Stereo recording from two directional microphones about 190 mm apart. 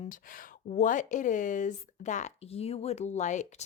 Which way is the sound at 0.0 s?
45° left (ahead or behind).